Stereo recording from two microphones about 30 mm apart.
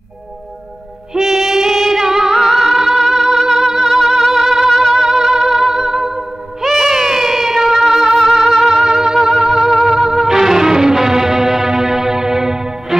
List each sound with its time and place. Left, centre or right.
1.2 s music: centre